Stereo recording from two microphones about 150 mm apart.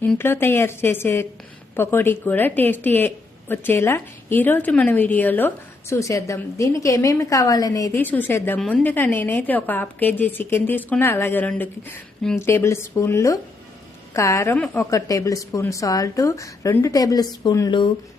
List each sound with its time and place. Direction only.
0.0 s a woman's voice: 15° left (ahead or behind)
7.9 s a woman's voice: 10° left (ahead or behind); by 17.8 s 25° left (ahead or behind)